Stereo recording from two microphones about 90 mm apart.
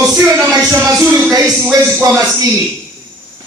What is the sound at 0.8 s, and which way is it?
Speech, 30° right (ahead or behind).